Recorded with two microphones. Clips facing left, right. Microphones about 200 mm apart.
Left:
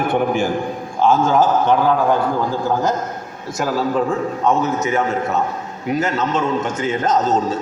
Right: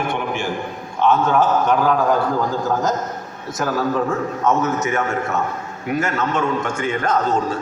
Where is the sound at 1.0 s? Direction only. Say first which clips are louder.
Left 2 dB; 30° left (ahead or behind).